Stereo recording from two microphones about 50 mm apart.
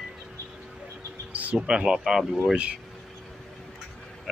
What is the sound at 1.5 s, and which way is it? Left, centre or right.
Speech, centre.